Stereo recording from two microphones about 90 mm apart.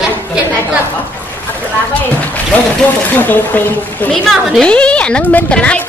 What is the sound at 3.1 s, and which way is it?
Speech, 20° left (ahead or behind).